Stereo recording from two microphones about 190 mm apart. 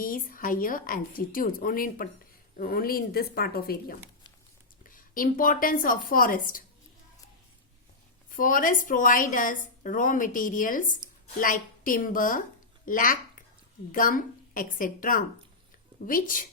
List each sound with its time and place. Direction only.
0.0 s a woman's voice: 50° left (ahead or behind)
4.9 s a woman's voice: 45° left (ahead or behind)
8.3 s a woman's voice: 45° left (ahead or behind)